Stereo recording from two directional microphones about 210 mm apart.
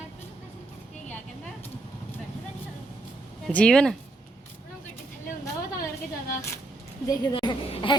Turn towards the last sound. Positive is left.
turn(degrees=25)  # may be behind; listen again after turning